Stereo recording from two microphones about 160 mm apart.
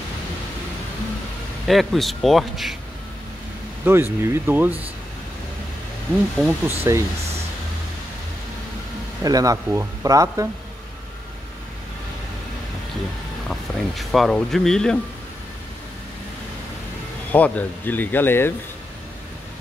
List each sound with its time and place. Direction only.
1.7 s speech: centre (ahead or behind)
3.8 s speech: 15° right (ahead or behind)
6.3 s speech: 5° right (ahead or behind)
9.2 s speech: 20° right (ahead or behind)
13.5 s speech: centre (ahead or behind)
17.3 s speech: 10° left (ahead or behind)